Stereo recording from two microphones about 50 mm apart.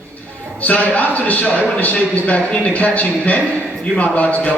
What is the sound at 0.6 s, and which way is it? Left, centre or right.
A man's voice, left.